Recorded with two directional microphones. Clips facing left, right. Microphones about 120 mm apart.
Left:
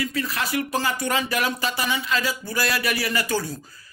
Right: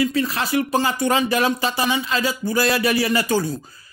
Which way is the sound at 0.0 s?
25° right (ahead or behind).